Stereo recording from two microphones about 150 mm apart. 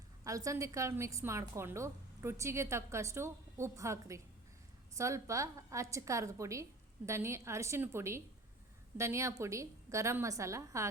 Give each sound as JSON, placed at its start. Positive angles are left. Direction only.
{"t": 0.3, "sound": "a woman's voice", "side_deg": -20}